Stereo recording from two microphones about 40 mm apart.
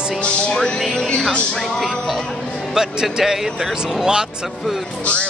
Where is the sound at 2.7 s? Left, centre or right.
Centre.